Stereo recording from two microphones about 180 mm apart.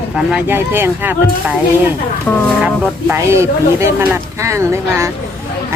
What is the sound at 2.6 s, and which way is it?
Speech, 15° right (ahead or behind).